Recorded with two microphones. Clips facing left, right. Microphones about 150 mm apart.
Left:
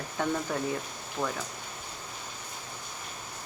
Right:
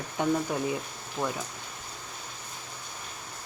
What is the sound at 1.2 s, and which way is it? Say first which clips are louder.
Speech: right 1 dB; centre (ahead or behind).